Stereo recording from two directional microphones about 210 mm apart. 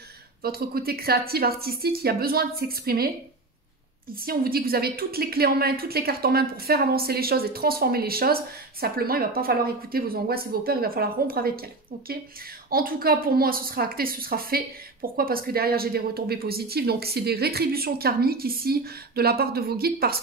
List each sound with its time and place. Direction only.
0.4 s a woman's voice: 45° right (ahead or behind)
4.3 s a woman's voice: 45° right (ahead or behind)
12.6 s a woman's voice: 45° right (ahead or behind)